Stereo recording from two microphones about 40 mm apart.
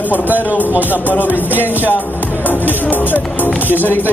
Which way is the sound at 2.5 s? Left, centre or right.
Left.